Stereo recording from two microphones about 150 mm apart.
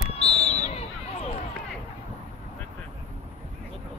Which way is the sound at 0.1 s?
45° left (ahead or behind).